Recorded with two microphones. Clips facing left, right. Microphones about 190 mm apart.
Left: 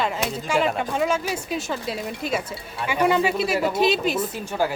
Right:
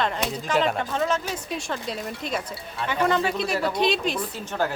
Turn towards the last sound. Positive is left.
turn(degrees=10)  # may be behind; listen again after turning